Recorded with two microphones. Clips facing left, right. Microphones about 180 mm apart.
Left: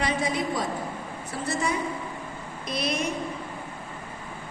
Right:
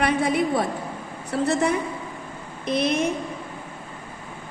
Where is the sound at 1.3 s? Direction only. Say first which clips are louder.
Right 7 dB; 65° right (ahead or behind).